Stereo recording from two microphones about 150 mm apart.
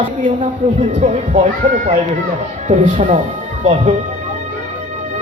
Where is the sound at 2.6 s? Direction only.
55° right (ahead or behind).